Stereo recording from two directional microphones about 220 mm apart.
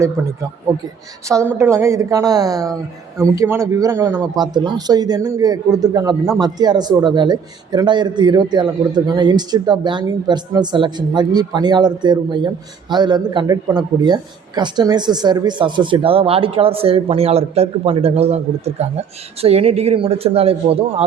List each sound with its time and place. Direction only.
1.3 s a man's voice: 10° right (ahead or behind)